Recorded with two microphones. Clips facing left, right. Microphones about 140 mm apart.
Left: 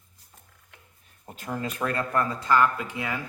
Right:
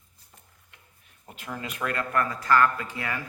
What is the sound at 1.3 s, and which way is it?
Speech, 35° left (ahead or behind).